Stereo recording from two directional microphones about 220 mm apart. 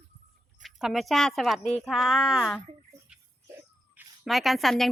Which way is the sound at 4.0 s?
Centre (ahead or behind).